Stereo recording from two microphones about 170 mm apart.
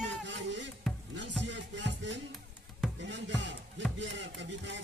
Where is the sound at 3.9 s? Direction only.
90° right.